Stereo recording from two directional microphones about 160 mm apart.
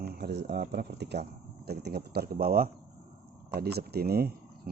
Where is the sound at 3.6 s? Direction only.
80° right.